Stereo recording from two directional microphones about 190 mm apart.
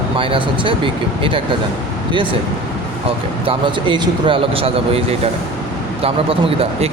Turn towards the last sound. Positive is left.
turn(degrees=-30)  # may be behind; listen again after turning